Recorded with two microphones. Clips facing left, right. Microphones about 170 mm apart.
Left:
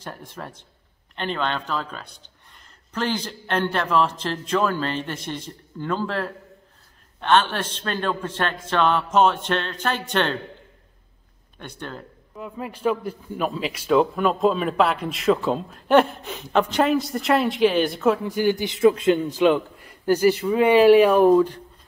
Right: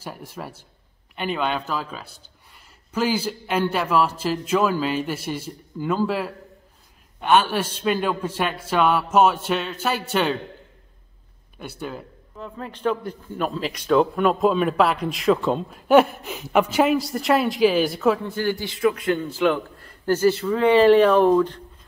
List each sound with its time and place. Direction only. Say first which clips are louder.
0.0 s a man's voice: right 1 dB; 5° right (ahead or behind)
11.5 s speech: right 3 dB; 10° right (ahead or behind)
12.4 s a man's voice: left 2 dB; 10° left (ahead or behind)
18.2 s a man's voice: left 3 dB; 15° left (ahead or behind)